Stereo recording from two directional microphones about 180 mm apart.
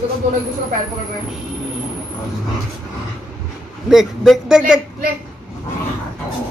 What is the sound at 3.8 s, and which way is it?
Speech, centre (ahead or behind).